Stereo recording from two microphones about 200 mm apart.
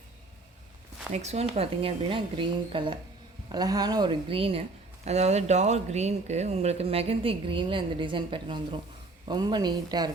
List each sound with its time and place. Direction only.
1.1 s a woman's voice: 35° right (ahead or behind)